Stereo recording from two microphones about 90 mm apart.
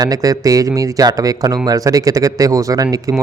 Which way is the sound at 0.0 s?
40° right (ahead or behind).